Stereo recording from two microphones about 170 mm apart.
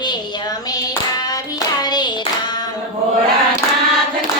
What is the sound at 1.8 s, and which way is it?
Hands, 25° left (ahead or behind).